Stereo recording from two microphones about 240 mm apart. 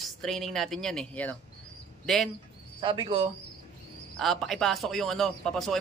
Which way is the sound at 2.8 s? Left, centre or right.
Right.